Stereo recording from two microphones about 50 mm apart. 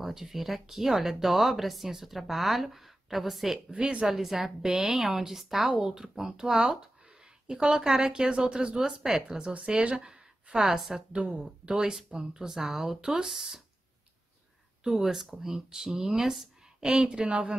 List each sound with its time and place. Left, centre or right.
0.0 s speech: centre
3.7 s speech: right
4.1 s speech: centre
9.4 s a woman's voice: right
11.7 s speech: centre
14.8 s speech: centre
16.8 s speech: centre